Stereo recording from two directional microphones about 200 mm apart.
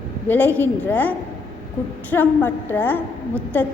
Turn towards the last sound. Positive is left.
turn(degrees=10)  # may be behind; listen again after turning